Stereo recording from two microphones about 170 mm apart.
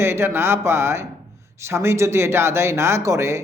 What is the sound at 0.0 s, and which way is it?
A man's voice, 15° right (ahead or behind).